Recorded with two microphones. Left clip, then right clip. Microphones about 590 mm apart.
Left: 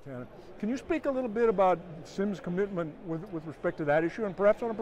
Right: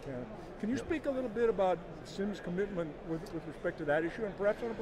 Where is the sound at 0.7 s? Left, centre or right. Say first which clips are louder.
Left 4 dB; left.